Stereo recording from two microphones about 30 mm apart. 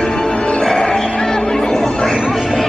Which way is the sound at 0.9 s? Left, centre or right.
Left.